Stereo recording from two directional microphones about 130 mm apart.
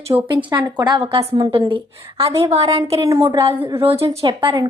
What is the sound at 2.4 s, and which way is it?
Speech, 55° right (ahead or behind).